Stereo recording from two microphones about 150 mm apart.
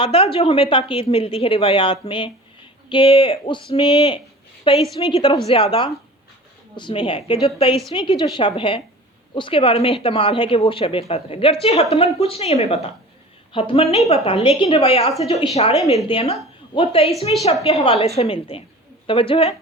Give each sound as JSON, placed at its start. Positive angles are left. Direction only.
{"t": 0.0, "sound": "a woman's voice", "side_deg": 40}